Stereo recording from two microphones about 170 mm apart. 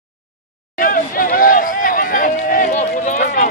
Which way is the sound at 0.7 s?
55° left (ahead or behind).